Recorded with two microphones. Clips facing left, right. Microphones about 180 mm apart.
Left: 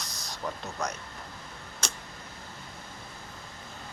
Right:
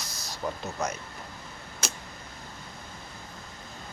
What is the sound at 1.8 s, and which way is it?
Tick-tock, 5° right (ahead or behind).